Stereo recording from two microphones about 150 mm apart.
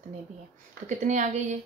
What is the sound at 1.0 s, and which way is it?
Speech, 55° right (ahead or behind).